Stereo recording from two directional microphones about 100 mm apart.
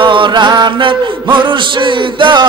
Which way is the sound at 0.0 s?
55° right (ahead or behind).